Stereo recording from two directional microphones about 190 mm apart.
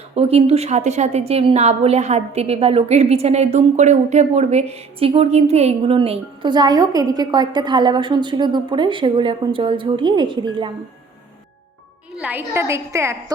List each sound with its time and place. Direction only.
0.2 s a woman's voice: 35° right (ahead or behind)
12.1 s a woman's voice: 10° right (ahead or behind)